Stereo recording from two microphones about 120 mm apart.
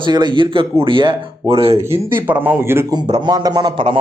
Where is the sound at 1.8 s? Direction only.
20° right (ahead or behind).